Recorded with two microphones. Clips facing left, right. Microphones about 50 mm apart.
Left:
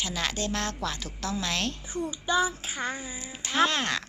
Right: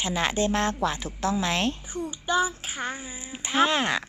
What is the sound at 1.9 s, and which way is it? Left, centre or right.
Speech, centre.